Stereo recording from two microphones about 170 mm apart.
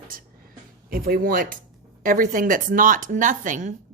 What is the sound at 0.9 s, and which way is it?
A woman's voice, 60° right (ahead or behind).